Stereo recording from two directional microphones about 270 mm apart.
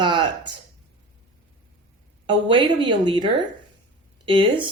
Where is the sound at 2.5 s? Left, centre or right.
Centre.